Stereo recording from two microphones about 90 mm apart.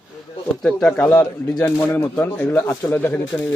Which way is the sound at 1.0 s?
45° left (ahead or behind).